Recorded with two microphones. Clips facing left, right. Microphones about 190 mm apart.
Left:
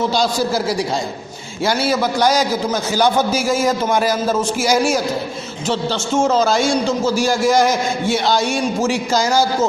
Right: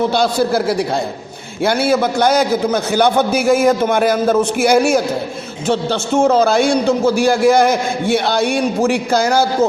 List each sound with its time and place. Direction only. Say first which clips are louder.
0.0 s a man's voice: right 3 dB; 60° right (ahead or behind)